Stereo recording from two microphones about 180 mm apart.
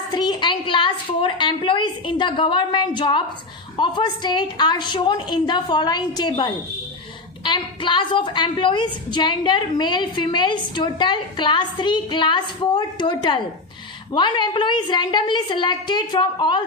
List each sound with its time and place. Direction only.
0.1 s a woman's voice: 25° left (ahead or behind)